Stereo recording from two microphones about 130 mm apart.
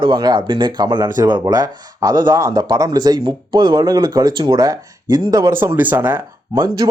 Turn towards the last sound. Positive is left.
turn(degrees=-20)  # may be behind; listen again after turning